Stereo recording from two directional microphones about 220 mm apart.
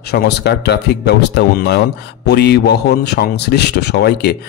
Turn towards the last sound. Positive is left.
turn(degrees=50)  # may be behind; listen again after turning